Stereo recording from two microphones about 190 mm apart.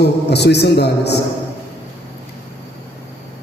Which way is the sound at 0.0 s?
60° left (ahead or behind).